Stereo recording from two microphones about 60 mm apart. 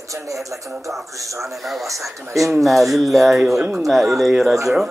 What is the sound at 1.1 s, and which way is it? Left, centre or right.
Speech, right.